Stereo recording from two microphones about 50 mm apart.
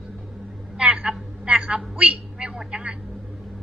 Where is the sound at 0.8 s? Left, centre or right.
Right.